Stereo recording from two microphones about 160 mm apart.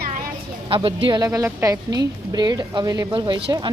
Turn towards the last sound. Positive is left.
turn(degrees=-25)  # may be behind; listen again after turning